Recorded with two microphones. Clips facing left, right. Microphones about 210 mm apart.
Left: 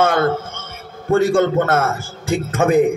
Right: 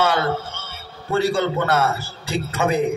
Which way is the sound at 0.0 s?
50° left (ahead or behind).